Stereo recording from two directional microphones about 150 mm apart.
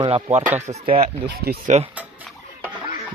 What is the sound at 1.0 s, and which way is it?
Speech, 90° right.